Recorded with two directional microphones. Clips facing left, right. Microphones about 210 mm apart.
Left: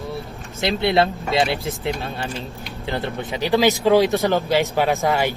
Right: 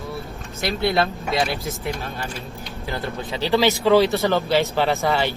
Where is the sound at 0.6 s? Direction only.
25° left (ahead or behind).